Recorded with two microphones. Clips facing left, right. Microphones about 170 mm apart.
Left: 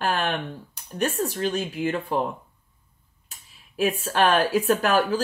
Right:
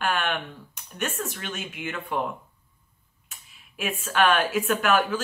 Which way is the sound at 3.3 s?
35° left (ahead or behind).